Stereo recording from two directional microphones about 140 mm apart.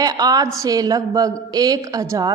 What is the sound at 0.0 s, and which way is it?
A woman's voice, 25° right (ahead or behind).